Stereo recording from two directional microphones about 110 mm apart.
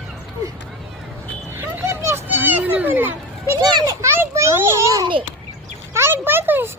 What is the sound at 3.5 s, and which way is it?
Children playing, 35° right (ahead or behind).